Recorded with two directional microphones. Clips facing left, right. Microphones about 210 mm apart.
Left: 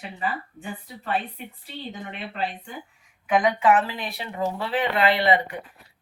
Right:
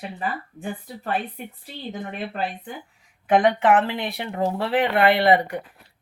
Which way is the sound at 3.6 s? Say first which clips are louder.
Right 2 dB; 60° right (ahead or behind).